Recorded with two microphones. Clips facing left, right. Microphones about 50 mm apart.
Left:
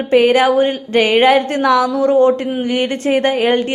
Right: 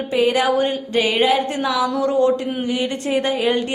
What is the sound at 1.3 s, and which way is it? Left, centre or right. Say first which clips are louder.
Speech: left 7 dB; left.